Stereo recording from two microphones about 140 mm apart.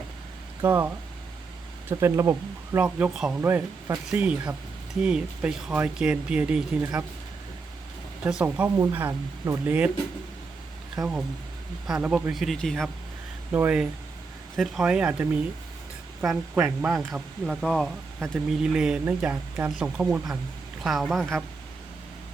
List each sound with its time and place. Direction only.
0.6 s speech: 15° right (ahead or behind)
1.9 s speech: 20° right (ahead or behind)
2.7 s speech: 10° right (ahead or behind)
3.4 s speech: 20° right (ahead or behind)
4.1 s speech: 10° right (ahead or behind)
8.2 s speech: 10° right (ahead or behind)
11.0 s speech: 5° right (ahead or behind)
12.3 s speech: centre (ahead or behind)
13.5 s speech: 10° right (ahead or behind)
17.1 s speech: centre (ahead or behind)